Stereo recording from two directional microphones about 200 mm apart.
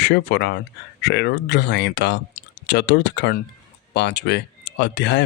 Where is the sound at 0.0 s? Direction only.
55° left (ahead or behind).